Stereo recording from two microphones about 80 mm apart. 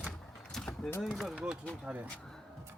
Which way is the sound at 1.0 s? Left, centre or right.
Centre.